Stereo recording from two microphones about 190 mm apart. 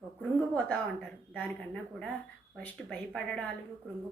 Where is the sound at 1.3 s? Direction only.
Centre (ahead or behind).